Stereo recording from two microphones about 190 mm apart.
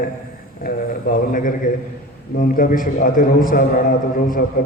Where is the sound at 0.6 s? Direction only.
45° left (ahead or behind).